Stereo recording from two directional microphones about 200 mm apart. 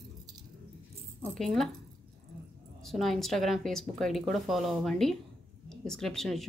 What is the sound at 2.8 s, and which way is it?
Speech, centre (ahead or behind).